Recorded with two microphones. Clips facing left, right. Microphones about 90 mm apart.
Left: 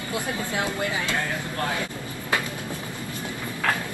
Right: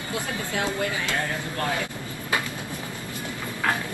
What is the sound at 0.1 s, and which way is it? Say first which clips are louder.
Speech: left 1 dB; 20° left (ahead or behind).